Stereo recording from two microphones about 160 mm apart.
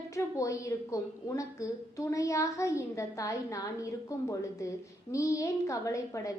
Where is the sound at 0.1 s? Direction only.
20° left (ahead or behind).